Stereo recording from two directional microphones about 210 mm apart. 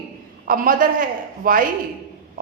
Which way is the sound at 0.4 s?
40° right (ahead or behind).